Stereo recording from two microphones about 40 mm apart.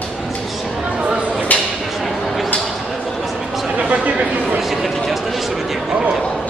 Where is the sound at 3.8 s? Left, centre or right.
Right.